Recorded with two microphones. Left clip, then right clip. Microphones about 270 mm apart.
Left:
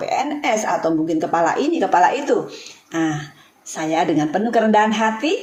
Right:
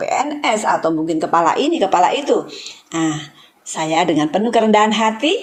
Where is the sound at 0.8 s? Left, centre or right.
Centre.